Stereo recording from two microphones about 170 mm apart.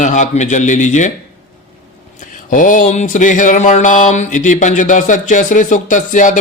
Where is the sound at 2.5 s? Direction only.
50° left (ahead or behind).